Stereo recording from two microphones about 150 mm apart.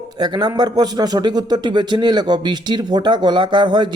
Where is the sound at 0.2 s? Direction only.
30° right (ahead or behind).